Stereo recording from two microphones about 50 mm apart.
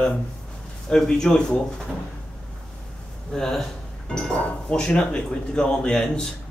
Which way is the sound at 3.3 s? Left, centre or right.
Centre.